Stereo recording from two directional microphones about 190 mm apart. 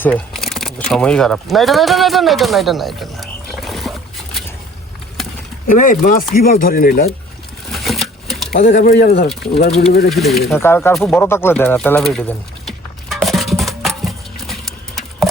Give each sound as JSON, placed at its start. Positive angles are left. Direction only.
{"t": 0.0, "sound": "speech", "side_deg": 5}
{"t": 5.6, "sound": "speech", "side_deg": 45}
{"t": 7.7, "sound": "a sound", "side_deg": 0}
{"t": 8.5, "sound": "speech", "side_deg": 45}
{"t": 10.1, "sound": "speech", "side_deg": 0}
{"t": 10.5, "sound": "speech", "side_deg": 10}
{"t": 12.0, "sound": "a sound", "side_deg": 0}
{"t": 13.2, "sound": "music", "side_deg": 0}